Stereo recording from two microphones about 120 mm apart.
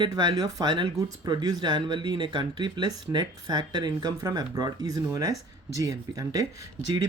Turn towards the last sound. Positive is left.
turn(degrees=-30)  # may be behind; listen again after turning